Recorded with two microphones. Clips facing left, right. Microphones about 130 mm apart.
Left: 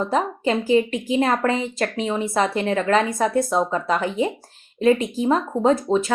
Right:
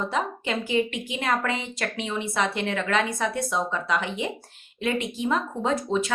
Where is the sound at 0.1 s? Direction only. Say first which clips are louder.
Left 6 dB; 40° left (ahead or behind).